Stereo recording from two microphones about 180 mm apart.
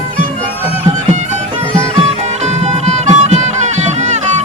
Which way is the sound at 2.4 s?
40° right (ahead or behind).